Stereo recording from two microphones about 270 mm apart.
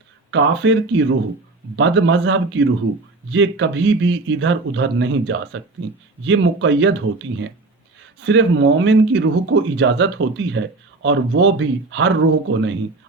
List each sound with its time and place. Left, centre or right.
0.3 s speech: right